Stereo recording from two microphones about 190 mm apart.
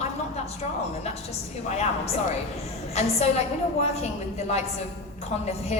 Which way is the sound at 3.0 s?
35° left (ahead or behind).